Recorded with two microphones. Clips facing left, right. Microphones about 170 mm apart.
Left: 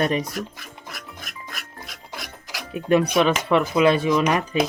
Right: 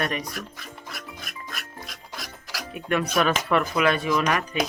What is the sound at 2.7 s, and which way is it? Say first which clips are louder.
Speech: left 6 dB; 30° left (ahead or behind).